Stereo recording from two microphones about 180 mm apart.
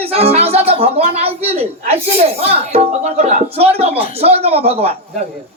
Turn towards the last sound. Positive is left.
turn(degrees=-35)  # may be behind; listen again after turning